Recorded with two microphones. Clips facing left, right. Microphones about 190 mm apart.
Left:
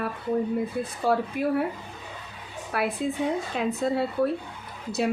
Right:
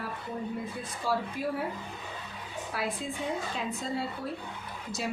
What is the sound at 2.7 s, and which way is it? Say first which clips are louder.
Speech: left 8 dB; 60° left (ahead or behind).